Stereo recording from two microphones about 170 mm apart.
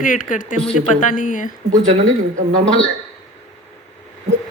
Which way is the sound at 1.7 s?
45° right (ahead or behind).